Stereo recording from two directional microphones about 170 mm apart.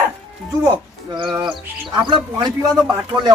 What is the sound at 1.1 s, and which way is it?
Speech, 25° right (ahead or behind).